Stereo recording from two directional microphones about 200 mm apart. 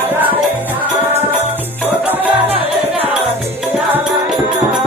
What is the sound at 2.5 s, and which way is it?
Music, 30° right (ahead or behind).